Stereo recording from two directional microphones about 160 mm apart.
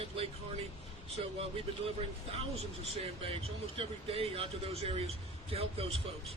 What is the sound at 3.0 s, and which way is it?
Speech, 35° right (ahead or behind).